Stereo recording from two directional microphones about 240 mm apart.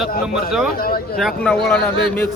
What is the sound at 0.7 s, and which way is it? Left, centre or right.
Speech, left.